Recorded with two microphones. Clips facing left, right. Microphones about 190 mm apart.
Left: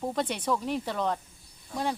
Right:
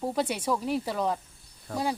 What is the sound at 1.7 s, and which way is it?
Speech, 65° right (ahead or behind).